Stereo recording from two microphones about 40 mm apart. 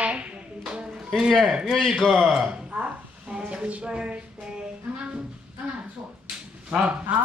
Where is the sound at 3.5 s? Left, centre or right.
Right.